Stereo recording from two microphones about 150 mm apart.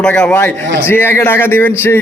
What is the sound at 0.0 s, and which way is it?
A man's voice, 10° left (ahead or behind).